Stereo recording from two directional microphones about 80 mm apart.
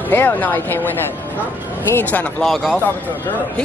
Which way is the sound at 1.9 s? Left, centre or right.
Left.